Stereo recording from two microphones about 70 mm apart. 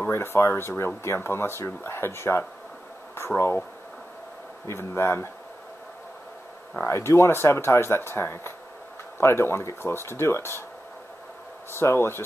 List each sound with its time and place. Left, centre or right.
0.1 s speech: left
4.6 s speech: left
6.9 s speech: left
11.7 s speech: left